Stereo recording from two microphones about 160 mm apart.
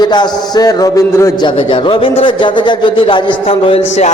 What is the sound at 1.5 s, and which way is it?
Speech, 35° left (ahead or behind).